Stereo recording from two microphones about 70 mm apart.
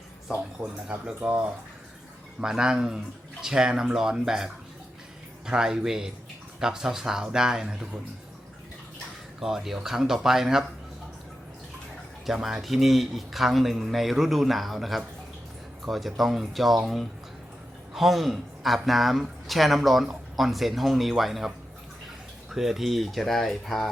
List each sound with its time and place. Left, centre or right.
0.6 s speech: centre
2.4 s speech: centre
9.4 s speech: centre
12.2 s speech: centre
22.5 s speech: centre